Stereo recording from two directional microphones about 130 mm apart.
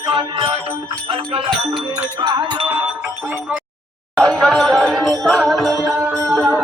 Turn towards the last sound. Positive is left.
turn(degrees=0)  # may be behind; listen again after turning